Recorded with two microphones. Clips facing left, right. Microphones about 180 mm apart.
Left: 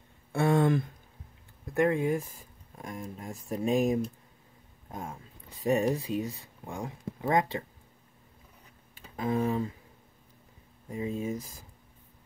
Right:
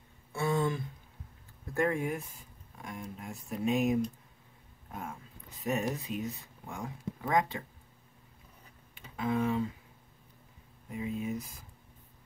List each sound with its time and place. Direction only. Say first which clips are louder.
0.3 s a sound: left 6 dB; 60° left (ahead or behind)
1.7 s speech: left 4 dB; 20° left (ahead or behind)
2.8 s speech: left 3 dB; 45° left (ahead or behind)
5.6 s speech: left 6 dB; 30° left (ahead or behind)
8.9 s speech: left 2 dB; 40° left (ahead or behind)
10.9 s speech: left 3 dB; 35° left (ahead or behind)